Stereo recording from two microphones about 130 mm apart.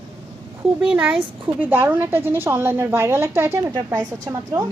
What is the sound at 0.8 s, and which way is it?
A woman's voice, 5° right (ahead or behind).